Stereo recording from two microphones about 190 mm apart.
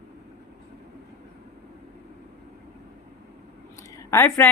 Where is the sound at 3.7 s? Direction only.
15° left (ahead or behind).